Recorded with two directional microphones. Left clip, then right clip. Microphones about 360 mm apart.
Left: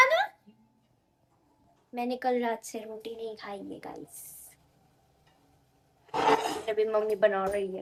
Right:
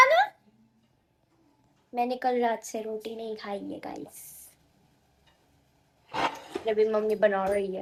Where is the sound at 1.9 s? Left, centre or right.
Centre.